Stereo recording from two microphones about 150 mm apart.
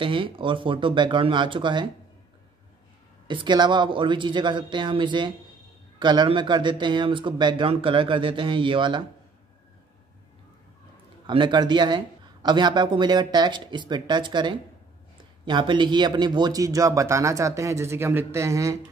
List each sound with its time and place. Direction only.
0.0 s speech: 35° right (ahead or behind)
3.3 s speech: 30° right (ahead or behind)
11.2 s speech: 30° right (ahead or behind)